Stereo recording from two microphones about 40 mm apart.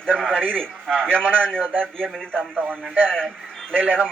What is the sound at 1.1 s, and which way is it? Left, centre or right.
Speech, right.